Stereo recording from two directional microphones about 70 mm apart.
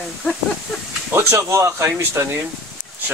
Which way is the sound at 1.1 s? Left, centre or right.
Right.